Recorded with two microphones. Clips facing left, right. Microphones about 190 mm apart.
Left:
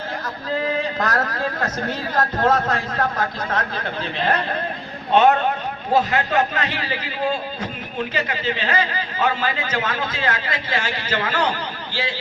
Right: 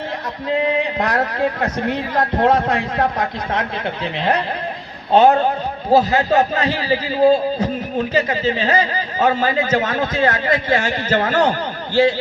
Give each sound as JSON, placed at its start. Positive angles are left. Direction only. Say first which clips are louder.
{"t": 0.5, "sound": "a man's voice", "louder": "right 4 dB", "side_deg": -25}
{"t": 5.1, "sound": "a man's voice", "louder": "right 3 dB", "side_deg": -35}